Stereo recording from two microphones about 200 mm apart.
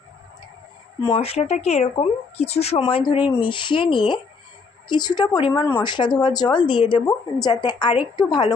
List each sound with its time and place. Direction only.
1.0 s speech: 30° left (ahead or behind)